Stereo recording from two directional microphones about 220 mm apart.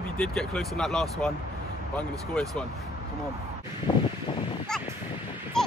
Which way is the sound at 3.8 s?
20° left (ahead or behind).